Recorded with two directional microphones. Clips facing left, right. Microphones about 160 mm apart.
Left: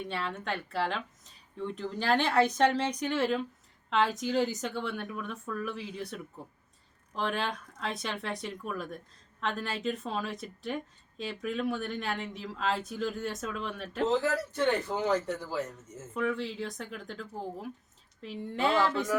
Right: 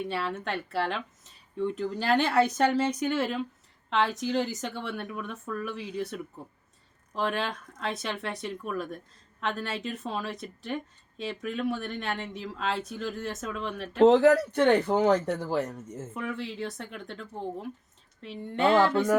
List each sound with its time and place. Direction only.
0.0 s speech: 5° right (ahead or behind)
14.0 s speech: 70° right (ahead or behind)
16.1 s speech: 5° right (ahead or behind)